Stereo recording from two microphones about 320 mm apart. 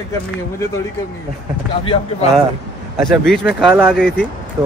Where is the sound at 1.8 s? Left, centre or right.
Centre.